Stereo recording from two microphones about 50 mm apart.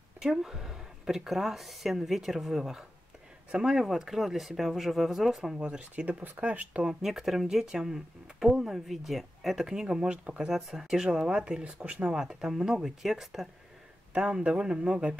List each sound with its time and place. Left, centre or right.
0.2 s speech: centre
5.6 s speech: right
6.8 s speech: centre
10.5 s speech: centre
11.6 s speech: right
12.2 s speech: centre
14.1 s speech: centre